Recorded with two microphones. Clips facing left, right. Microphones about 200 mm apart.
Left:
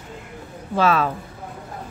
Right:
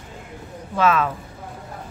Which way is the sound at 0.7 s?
35° left (ahead or behind).